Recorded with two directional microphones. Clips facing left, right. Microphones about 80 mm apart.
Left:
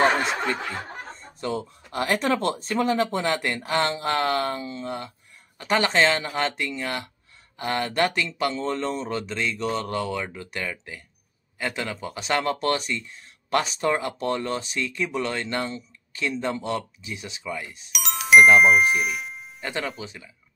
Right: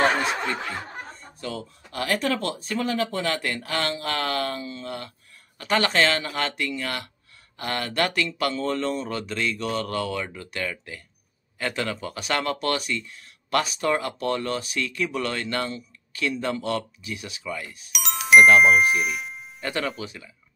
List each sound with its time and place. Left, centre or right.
1.4 s speech: left
17.9 s music: centre
20.0 s speech: left